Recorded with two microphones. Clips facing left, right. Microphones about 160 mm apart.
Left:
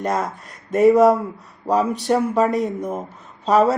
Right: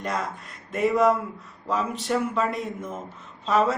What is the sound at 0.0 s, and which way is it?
Speech, 45° left (ahead or behind).